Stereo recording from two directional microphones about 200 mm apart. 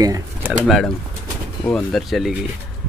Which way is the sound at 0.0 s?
15° right (ahead or behind).